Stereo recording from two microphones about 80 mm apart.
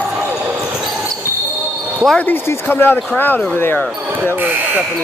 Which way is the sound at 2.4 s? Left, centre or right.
Left.